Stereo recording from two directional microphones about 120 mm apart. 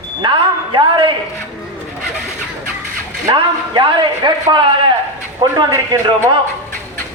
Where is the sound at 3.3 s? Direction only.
40° right (ahead or behind).